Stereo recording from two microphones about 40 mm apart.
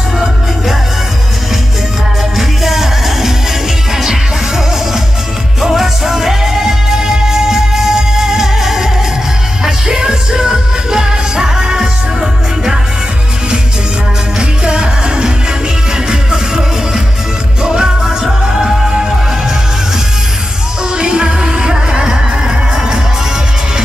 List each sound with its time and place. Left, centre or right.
2.3 s music: centre
5.6 s music: centre
14.4 s music: right
18.2 s music: centre
20.9 s music: right